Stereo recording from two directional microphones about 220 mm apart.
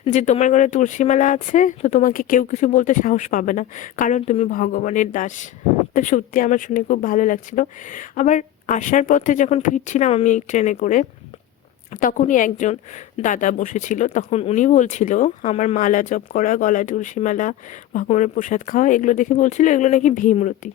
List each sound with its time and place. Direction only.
0.0 s speech: 30° left (ahead or behind)